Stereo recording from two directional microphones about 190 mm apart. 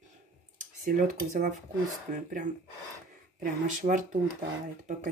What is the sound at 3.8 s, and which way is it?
Speech, 40° right (ahead or behind).